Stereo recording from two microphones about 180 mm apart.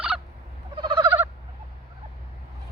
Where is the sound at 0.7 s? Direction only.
25° right (ahead or behind).